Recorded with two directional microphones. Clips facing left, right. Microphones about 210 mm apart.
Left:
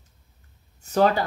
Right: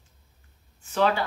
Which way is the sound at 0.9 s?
40° left (ahead or behind).